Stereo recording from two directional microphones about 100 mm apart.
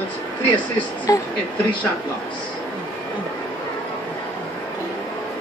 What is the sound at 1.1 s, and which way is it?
Speech, 35° left (ahead or behind).